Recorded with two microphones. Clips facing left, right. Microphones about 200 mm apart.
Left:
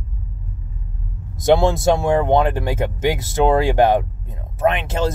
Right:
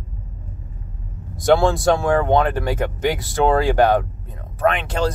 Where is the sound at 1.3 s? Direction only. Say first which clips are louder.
Left 1 dB; 20° left (ahead or behind).